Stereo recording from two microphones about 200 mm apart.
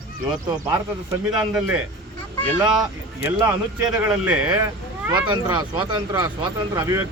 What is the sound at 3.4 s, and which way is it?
Speech, 20° right (ahead or behind).